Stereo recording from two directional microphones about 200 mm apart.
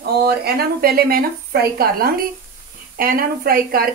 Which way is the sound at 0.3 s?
50° right (ahead or behind).